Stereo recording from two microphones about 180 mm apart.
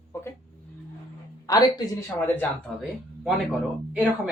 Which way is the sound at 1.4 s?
20° left (ahead or behind).